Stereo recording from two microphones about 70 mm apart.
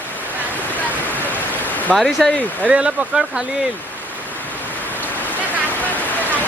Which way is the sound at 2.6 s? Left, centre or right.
Centre.